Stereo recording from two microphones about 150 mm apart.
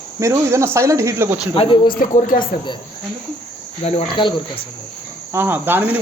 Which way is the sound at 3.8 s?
35° left (ahead or behind).